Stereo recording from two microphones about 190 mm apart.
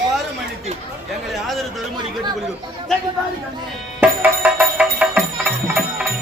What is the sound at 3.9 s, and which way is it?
Music, 10° right (ahead or behind).